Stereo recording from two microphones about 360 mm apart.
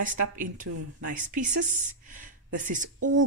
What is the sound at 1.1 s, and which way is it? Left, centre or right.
Speech, right.